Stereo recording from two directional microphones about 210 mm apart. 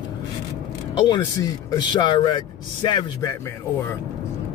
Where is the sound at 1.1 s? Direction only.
15° left (ahead or behind).